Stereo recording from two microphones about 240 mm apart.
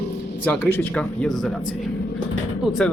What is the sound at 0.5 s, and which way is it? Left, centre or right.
A man's voice, centre.